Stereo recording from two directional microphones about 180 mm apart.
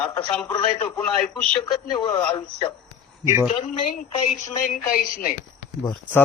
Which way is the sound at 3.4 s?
40° left (ahead or behind).